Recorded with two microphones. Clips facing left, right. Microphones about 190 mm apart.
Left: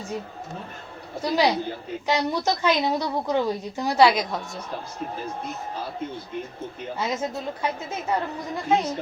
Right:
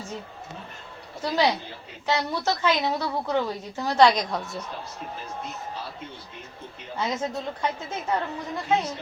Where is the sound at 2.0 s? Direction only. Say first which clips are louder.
Left 2 dB; 15° left (ahead or behind).